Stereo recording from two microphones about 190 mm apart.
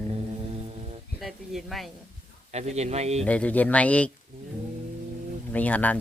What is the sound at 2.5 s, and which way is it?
Speech, 35° right (ahead or behind).